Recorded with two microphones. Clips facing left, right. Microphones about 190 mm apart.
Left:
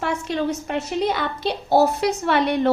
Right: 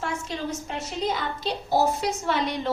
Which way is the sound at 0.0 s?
65° left (ahead or behind).